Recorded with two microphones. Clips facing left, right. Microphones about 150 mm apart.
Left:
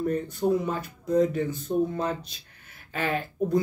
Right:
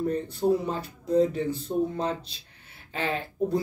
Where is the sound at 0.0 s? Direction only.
30° right (ahead or behind).